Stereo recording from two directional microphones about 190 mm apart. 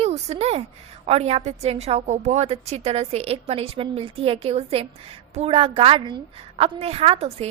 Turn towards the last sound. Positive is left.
turn(degrees=-30)  # may be behind; listen again after turning